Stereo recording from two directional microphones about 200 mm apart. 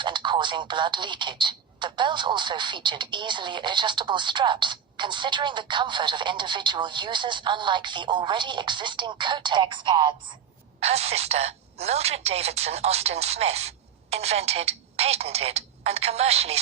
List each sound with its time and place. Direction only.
0.0 s a woman's voice: 25° right (ahead or behind)